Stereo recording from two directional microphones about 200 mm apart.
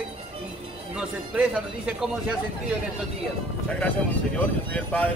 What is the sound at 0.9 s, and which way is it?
Speech, 5° right (ahead or behind).